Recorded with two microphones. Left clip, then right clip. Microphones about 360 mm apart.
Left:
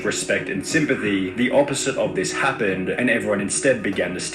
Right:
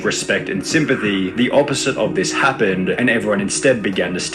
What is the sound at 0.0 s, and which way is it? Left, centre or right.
Speech, right.